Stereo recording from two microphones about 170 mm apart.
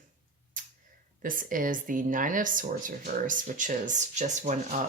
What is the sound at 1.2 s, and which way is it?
Speech, 55° right (ahead or behind).